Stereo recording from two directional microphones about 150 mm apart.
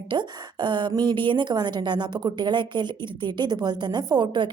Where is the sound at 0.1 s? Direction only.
30° right (ahead or behind).